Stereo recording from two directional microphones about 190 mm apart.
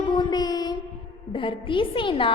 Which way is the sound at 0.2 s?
20° left (ahead or behind).